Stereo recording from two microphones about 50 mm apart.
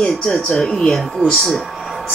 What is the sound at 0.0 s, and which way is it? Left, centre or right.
Speech, centre.